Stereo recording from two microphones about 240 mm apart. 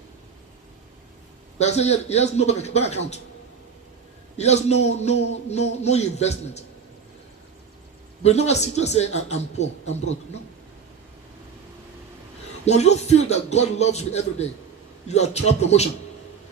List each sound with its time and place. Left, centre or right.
1.5 s a man's voice: left
4.4 s a man's voice: left
8.2 s a man's voice: left
12.6 s a man's voice: left